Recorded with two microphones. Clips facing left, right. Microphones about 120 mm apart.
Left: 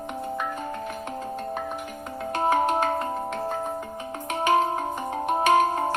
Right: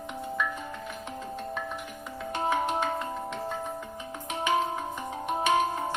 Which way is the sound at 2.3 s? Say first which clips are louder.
Left 5 dB; 50° left (ahead or behind).